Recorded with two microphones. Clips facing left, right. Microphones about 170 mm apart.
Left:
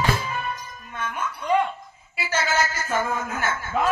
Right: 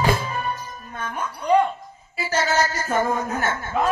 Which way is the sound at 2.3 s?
35° right (ahead or behind).